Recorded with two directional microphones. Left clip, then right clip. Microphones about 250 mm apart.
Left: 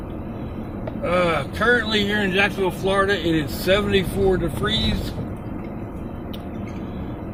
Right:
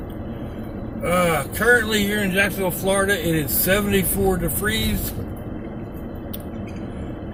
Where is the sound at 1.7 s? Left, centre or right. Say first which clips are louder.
Right 2 dB; centre.